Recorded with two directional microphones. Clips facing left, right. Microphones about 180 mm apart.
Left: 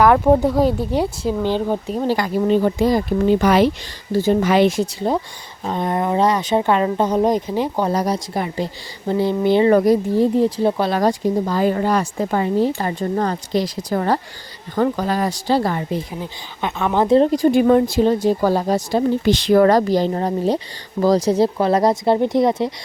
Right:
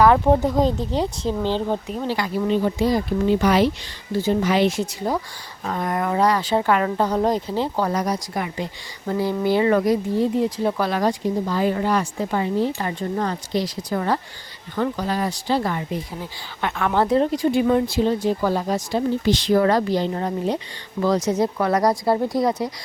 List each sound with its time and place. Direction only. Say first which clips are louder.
0.0 s speech: left 2 dB; 10° left (ahead or behind)
1.9 s speech: left 5 dB; 40° left (ahead or behind)
4.8 s speech: left 4 dB; 25° left (ahead or behind)
7.9 s speech: left 3 dB; 30° left (ahead or behind)
11.0 s speech: left 4 dB; 45° left (ahead or behind)
15.4 s speech: left 4 dB; 35° left (ahead or behind)
16.2 s speech: left 2 dB; 20° left (ahead or behind)
17.2 s speech: left 5 dB; 45° left (ahead or behind)
19.2 s speech: left 5 dB; 60° left (ahead or behind)
19.7 s speech: left 4 dB; 40° left (ahead or behind); by 22.7 s 25° left (ahead or behind)